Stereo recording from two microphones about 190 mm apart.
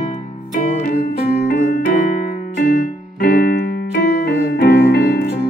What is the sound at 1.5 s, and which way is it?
Music, 45° left (ahead or behind).